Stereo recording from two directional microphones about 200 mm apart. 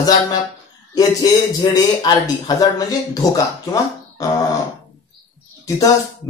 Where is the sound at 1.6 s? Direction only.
20° left (ahead or behind).